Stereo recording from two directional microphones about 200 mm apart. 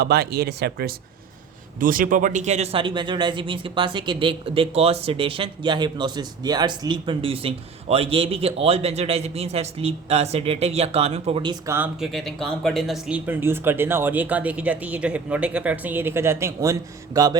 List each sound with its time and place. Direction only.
0.0 s speech: 50° right (ahead or behind); by 11.5 s 30° right (ahead or behind)
11.6 s speech: 15° right (ahead or behind)
11.9 s speech: centre (ahead or behind)